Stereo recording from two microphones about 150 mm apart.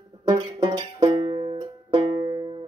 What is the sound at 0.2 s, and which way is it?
Music, 30° right (ahead or behind).